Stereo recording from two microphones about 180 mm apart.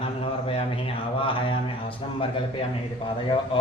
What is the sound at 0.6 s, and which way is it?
Speech, 30° left (ahead or behind).